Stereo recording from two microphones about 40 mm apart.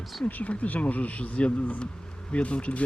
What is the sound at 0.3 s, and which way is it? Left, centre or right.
Speech, left.